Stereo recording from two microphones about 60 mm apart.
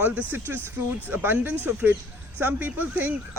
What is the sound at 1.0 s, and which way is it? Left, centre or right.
Speech, right.